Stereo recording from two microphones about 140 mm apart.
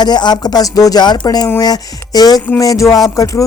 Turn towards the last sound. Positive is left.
turn(degrees=25)  # may be behind; listen again after turning